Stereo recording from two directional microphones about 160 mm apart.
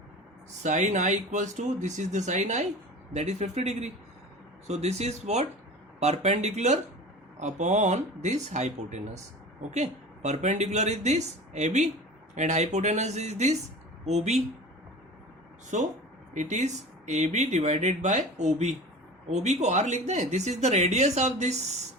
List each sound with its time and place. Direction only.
0.6 s speech: 45° right (ahead or behind)
15.7 s speech: 50° right (ahead or behind)